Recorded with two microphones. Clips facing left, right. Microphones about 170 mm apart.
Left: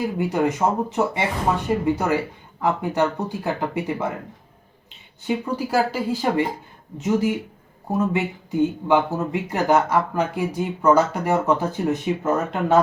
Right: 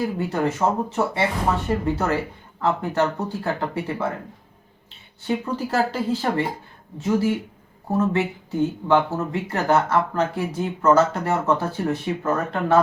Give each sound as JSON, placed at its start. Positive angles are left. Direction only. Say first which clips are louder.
{"t": 0.2, "sound": "speech", "louder": "left 5 dB", "side_deg": 15}
{"t": 5.2, "sound": "speech", "louder": "left 1 dB", "side_deg": 10}